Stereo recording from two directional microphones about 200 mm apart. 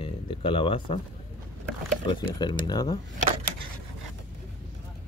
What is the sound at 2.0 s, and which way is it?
Speech, 20° left (ahead or behind).